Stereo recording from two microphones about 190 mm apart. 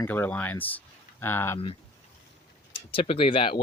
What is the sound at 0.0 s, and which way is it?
Speech, 10° left (ahead or behind).